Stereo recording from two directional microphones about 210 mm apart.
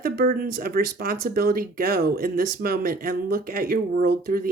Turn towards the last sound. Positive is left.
turn(degrees=-45)  # may be behind; listen again after turning